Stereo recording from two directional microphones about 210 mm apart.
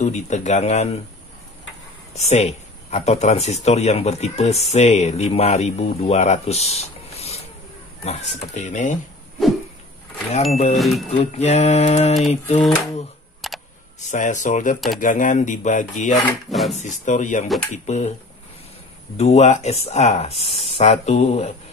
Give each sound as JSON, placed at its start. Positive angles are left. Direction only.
{"t": 0.0, "sound": "speech", "side_deg": 35}
{"t": 2.1, "sound": "speech", "side_deg": 30}
{"t": 10.5, "sound": "speech", "side_deg": 30}
{"t": 10.8, "sound": "speech", "side_deg": 0}
{"t": 11.1, "sound": "speech", "side_deg": 30}
{"t": 12.6, "sound": "speech", "side_deg": 0}
{"t": 13.4, "sound": "computer keyboard", "side_deg": 0}
{"t": 13.9, "sound": "speech", "side_deg": 35}
{"t": 16.3, "sound": "speech", "side_deg": 0}
{"t": 16.7, "sound": "speech", "side_deg": 35}
{"t": 19.1, "sound": "speech", "side_deg": 30}